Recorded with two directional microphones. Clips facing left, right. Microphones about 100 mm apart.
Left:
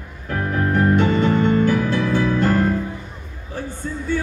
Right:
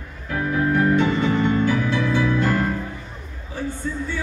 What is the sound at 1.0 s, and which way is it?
Music, 40° left (ahead or behind).